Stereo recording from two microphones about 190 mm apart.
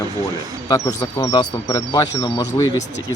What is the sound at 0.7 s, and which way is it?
Speech, 15° left (ahead or behind).